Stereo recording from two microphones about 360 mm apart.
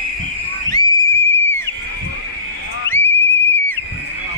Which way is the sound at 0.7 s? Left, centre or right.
Centre.